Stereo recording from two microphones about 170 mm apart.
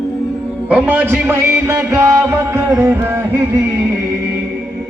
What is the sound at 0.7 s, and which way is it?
Music, 5° right (ahead or behind).